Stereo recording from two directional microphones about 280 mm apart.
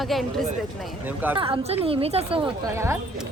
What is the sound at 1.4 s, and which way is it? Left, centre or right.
A woman's voice, centre.